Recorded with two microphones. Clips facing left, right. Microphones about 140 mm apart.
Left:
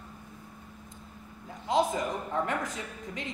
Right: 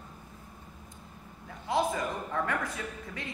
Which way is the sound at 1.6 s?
20° left (ahead or behind).